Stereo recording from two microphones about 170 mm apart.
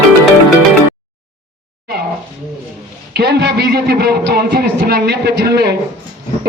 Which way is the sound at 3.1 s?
75° right (ahead or behind).